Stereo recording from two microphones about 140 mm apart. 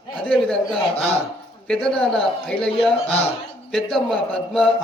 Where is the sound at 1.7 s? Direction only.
5° left (ahead or behind).